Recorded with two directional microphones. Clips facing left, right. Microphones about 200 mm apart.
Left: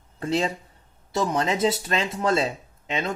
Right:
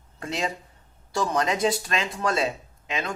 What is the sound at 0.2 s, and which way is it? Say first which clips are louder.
Speech: left 5 dB; 30° left (ahead or behind).